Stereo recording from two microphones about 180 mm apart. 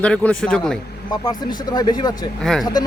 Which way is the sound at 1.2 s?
25° left (ahead or behind).